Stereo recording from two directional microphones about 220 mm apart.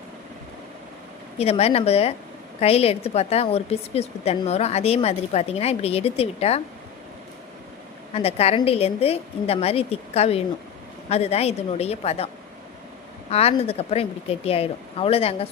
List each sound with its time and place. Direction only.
1.4 s a woman's voice: 30° left (ahead or behind)
8.1 s a woman's voice: 25° left (ahead or behind)
13.3 s a woman's voice: 25° left (ahead or behind)